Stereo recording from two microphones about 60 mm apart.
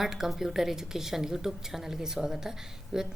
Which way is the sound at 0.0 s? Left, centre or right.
Centre.